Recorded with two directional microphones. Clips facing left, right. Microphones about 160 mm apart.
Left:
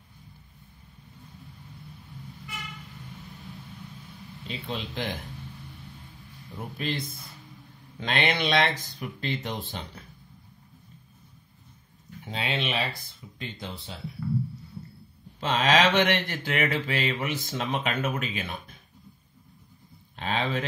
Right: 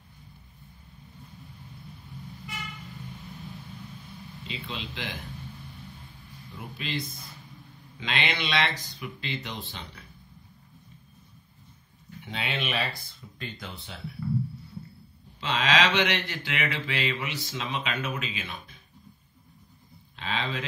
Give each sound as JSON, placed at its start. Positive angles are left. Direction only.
{"t": 4.5, "sound": "mantra", "side_deg": 45}
{"t": 6.8, "sound": "mantra", "side_deg": 50}
{"t": 12.3, "sound": "speech", "side_deg": 30}
{"t": 15.4, "sound": "mantra", "side_deg": 45}
{"t": 20.2, "sound": "speech", "side_deg": 45}